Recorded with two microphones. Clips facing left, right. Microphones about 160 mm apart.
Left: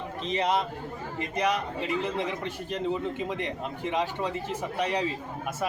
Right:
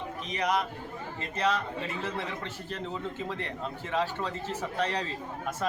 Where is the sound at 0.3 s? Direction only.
25° left (ahead or behind).